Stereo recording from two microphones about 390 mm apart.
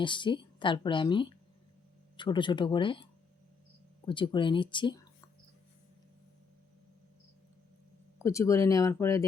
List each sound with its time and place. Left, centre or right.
0.0 s speech: centre
8.2 s speech: centre